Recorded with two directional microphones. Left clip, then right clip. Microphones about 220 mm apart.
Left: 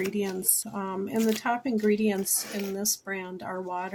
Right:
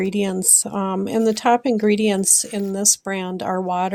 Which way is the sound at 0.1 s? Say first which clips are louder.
Right 10 dB; 40° right (ahead or behind).